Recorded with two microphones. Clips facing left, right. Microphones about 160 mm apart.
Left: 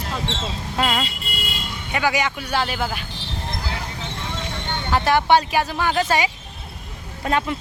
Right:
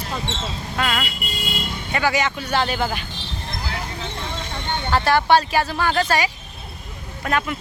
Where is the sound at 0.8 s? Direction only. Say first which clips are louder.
Left 2 dB; 25° left (ahead or behind).